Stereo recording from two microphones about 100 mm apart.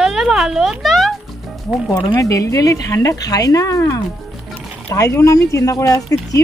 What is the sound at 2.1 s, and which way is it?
Speech, 30° left (ahead or behind).